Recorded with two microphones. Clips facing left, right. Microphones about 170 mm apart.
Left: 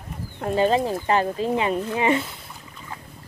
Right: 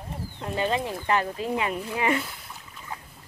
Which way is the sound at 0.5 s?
35° left (ahead or behind).